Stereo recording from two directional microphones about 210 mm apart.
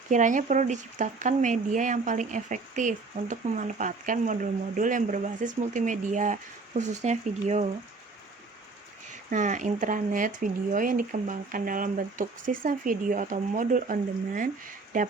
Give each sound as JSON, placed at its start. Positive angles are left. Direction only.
{"t": 0.1, "sound": "speech", "side_deg": -35}
{"t": 9.3, "sound": "speech", "side_deg": -35}